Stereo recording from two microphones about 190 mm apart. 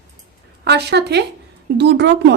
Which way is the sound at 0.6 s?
60° right (ahead or behind).